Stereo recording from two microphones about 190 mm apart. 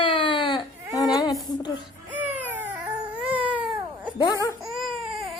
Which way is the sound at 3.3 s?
10° right (ahead or behind).